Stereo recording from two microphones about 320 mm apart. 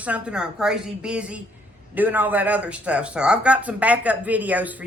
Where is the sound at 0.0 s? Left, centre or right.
Centre.